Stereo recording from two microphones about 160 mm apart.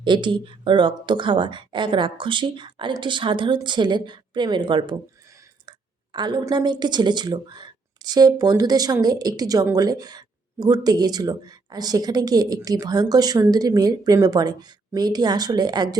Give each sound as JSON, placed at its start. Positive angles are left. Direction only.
{"t": 0.0, "sound": "speech", "side_deg": -30}
{"t": 6.1, "sound": "speech", "side_deg": -30}